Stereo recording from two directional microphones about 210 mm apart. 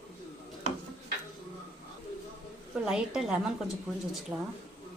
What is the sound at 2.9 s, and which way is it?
Speech, centre (ahead or behind).